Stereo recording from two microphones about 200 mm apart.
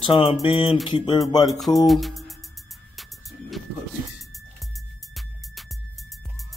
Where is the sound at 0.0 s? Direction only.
25° left (ahead or behind).